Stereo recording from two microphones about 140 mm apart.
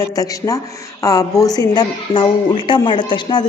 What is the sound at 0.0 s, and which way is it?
A man's voice, 25° left (ahead or behind).